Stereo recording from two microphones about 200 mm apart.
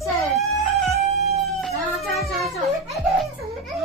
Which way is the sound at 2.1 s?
Centre (ahead or behind).